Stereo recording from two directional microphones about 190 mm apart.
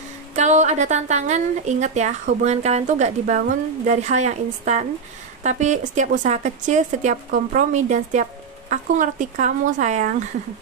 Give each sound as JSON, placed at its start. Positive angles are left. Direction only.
{"t": 0.4, "sound": "speech", "side_deg": -40}